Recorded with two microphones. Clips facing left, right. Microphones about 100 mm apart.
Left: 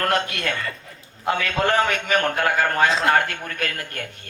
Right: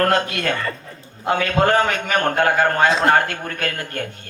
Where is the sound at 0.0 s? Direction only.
35° right (ahead or behind).